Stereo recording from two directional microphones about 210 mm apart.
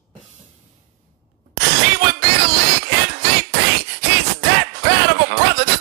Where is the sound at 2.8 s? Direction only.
50° right (ahead or behind).